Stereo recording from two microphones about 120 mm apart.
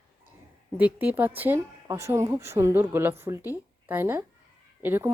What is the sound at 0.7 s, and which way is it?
Speech, 15° right (ahead or behind).